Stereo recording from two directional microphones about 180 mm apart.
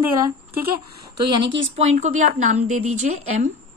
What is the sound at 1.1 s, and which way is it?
Speech, 25° right (ahead or behind).